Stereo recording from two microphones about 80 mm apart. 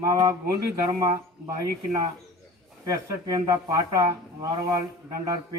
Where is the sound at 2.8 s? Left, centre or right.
Right.